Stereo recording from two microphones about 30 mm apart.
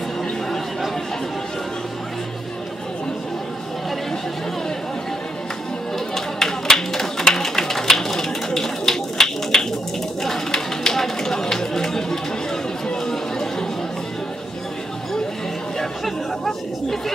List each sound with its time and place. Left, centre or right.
5.9 s chatter: centre
7.3 s a sound: centre
12.9 s chatter: centre